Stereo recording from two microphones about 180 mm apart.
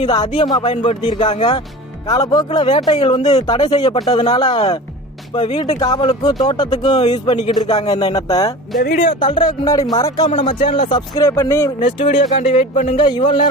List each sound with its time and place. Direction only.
0.0 s speech: 25° left (ahead or behind)
2.0 s speech: 20° left (ahead or behind)
7.9 s speech: 35° left (ahead or behind)
8.1 s speech: 20° left (ahead or behind)
10.2 s speech: 40° left (ahead or behind)
10.5 s speech: 30° left (ahead or behind)
11.8 s speech: 40° left (ahead or behind)